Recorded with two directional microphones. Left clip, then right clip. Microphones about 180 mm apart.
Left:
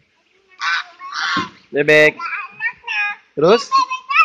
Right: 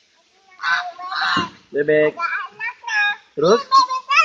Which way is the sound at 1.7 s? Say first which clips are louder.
Left 5 dB; 20° left (ahead or behind).